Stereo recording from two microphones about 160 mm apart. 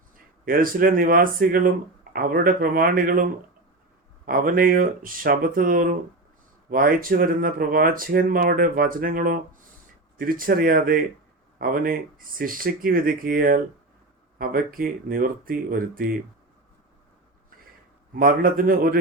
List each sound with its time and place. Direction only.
0.4 s speech: 65° right (ahead or behind)
4.3 s speech: 60° right (ahead or behind)
18.1 s speech: 60° right (ahead or behind)